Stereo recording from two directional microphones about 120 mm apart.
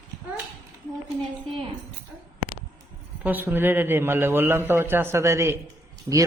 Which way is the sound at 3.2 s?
15° right (ahead or behind).